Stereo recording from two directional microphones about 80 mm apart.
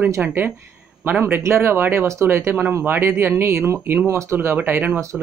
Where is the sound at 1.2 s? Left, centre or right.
Right.